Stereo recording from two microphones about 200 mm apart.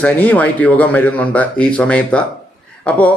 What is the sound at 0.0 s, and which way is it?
A man's voice, 5° left (ahead or behind).